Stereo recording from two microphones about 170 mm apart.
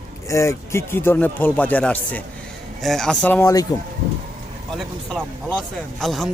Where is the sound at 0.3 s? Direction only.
15° left (ahead or behind).